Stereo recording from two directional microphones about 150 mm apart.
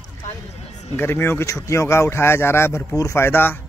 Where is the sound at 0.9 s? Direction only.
15° left (ahead or behind).